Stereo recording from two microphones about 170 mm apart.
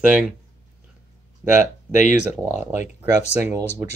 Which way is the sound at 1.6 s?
50° left (ahead or behind).